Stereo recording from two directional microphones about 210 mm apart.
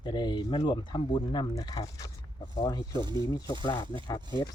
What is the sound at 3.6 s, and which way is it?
Speech, 20° left (ahead or behind).